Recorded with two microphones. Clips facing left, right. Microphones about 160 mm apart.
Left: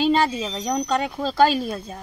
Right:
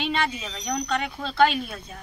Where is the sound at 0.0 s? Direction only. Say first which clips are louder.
Left 7 dB; 35° left (ahead or behind).